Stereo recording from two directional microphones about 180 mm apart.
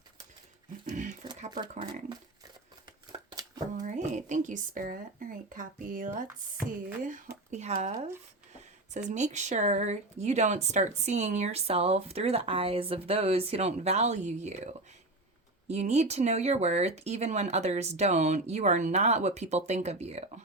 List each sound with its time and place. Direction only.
0.9 s a sound: 45° right (ahead or behind)
3.1 s shuffling cards: 20° right (ahead or behind)
3.8 s speech: 40° right (ahead or behind)